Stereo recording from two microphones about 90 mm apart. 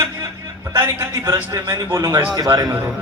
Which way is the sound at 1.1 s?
45° right (ahead or behind).